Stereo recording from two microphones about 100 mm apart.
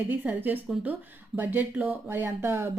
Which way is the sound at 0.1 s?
20° right (ahead or behind).